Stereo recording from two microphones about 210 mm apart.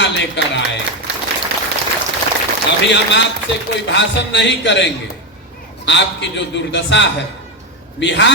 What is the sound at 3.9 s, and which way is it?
A man's voice, 55° left (ahead or behind).